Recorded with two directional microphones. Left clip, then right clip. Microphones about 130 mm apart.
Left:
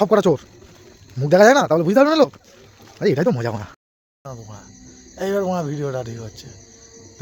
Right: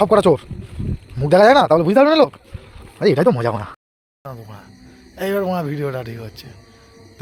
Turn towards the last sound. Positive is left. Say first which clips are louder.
# even
turn(degrees=0)  # may be behind; listen again after turning